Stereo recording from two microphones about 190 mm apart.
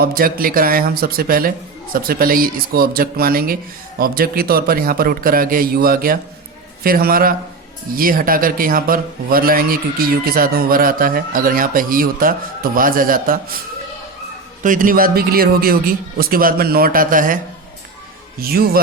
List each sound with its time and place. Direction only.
0.0 s speech: 50° right (ahead or behind)
14.6 s speech: 45° right (ahead or behind)